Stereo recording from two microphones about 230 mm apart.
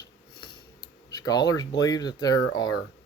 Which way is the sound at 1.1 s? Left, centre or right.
Centre.